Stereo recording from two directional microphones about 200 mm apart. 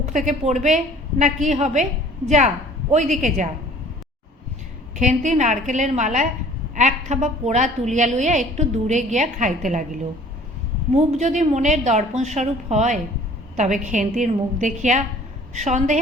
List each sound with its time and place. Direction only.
0.1 s a woman's voice: 40° right (ahead or behind)
2.9 s a woman's voice: 35° right (ahead or behind)
4.9 s a woman's voice: 35° right (ahead or behind)